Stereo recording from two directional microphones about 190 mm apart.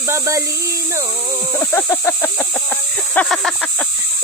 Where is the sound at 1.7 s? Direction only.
15° left (ahead or behind).